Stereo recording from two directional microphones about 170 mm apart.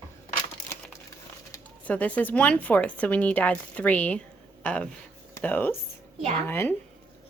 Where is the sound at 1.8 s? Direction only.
10° left (ahead or behind).